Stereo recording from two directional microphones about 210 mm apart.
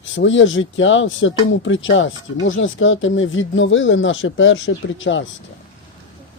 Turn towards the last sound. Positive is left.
turn(degrees=65)  # may be behind; listen again after turning